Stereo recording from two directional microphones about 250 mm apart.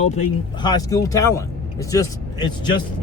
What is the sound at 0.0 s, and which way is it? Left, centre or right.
Speech, left.